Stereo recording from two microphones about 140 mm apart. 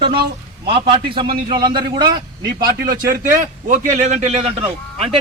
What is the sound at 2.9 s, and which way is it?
Speech, 80° right.